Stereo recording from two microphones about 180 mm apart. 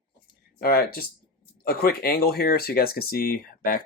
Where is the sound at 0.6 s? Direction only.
55° left (ahead or behind).